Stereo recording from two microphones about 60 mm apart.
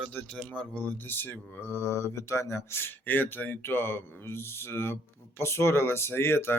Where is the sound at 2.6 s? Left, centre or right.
Left.